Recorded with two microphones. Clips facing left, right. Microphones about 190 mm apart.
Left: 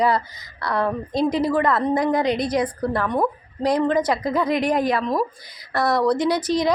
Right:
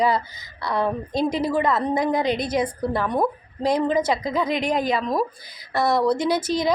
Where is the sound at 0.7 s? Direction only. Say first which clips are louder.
Left 1 dB; 15° right (ahead or behind).